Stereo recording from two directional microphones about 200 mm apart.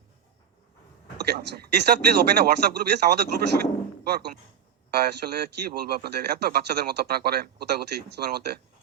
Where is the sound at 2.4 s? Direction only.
55° right (ahead or behind).